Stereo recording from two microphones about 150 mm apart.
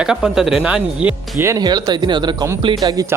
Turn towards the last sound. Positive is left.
turn(degrees=-25)  # may be behind; listen again after turning